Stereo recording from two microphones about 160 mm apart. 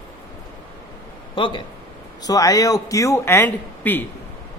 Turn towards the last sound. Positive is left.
turn(degrees=10)  # may be behind; listen again after turning